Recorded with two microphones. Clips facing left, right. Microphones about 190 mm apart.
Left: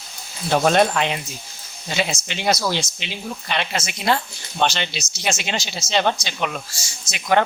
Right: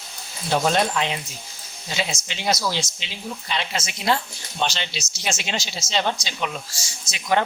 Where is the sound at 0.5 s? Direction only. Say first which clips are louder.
Left 4 dB; 60° left (ahead or behind).